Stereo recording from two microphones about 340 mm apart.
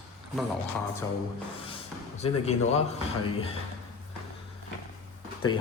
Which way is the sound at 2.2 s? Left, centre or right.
Centre.